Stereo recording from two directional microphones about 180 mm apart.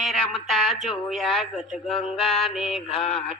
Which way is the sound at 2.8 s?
30° left (ahead or behind).